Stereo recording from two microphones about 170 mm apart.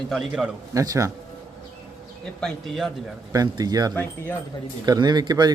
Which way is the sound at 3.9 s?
15° left (ahead or behind).